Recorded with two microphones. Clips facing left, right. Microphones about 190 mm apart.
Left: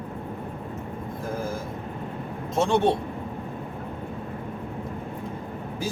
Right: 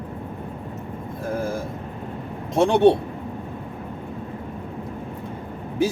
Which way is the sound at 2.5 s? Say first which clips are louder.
Right 6 dB; 70° right (ahead or behind).